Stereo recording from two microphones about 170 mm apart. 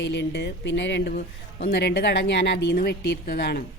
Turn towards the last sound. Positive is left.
turn(degrees=65)  # may be behind; listen again after turning